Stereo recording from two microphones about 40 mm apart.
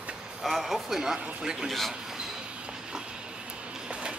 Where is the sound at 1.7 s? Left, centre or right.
Centre.